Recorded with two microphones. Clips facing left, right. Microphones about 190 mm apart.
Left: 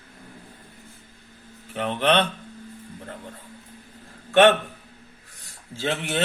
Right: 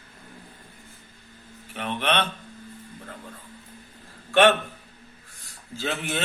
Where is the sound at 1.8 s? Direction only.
40° left (ahead or behind).